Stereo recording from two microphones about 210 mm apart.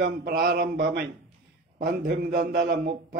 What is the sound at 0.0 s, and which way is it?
Speech, 45° right (ahead or behind).